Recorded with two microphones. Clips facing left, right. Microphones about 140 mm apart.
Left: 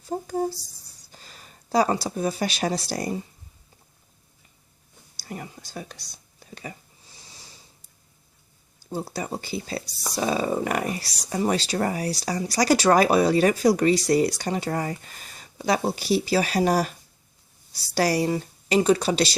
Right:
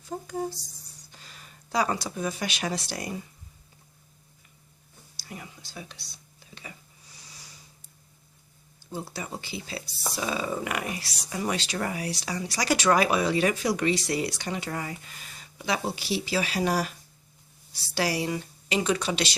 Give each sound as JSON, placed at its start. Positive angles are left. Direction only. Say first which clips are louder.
{"t": 0.0, "sound": "speech", "louder": "left 5 dB", "side_deg": 35}
{"t": 5.2, "sound": "speech", "louder": "left 6 dB", "side_deg": 45}
{"t": 7.1, "sound": "snort", "louder": "left 2 dB", "side_deg": 25}
{"t": 8.9, "sound": "speech", "louder": "left 5 dB", "side_deg": 40}
{"t": 17.9, "sound": "speech", "louder": "left 5 dB", "side_deg": 40}